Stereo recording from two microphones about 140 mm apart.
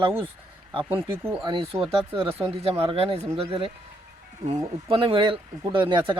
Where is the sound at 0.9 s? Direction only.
15° right (ahead or behind).